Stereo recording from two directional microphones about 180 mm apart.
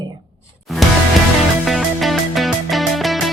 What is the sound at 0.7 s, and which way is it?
Music, centre (ahead or behind).